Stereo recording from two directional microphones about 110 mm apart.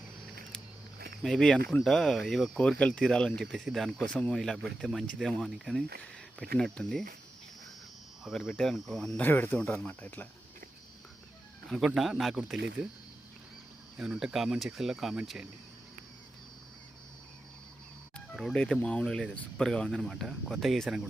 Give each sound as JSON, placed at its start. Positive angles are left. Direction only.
{"t": 1.2, "sound": "speech", "side_deg": 5}
{"t": 8.2, "sound": "speech", "side_deg": 0}
{"t": 9.2, "sound": "speech", "side_deg": 15}
{"t": 11.7, "sound": "speech", "side_deg": 0}
{"t": 13.9, "sound": "speech", "side_deg": -5}
{"t": 18.3, "sound": "speech", "side_deg": 5}